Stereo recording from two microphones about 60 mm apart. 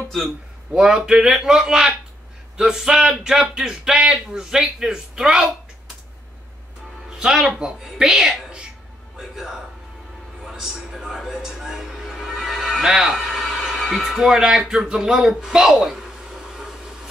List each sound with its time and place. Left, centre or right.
0.7 s speech: centre
7.1 s a man's voice: centre
10.4 s a sound: centre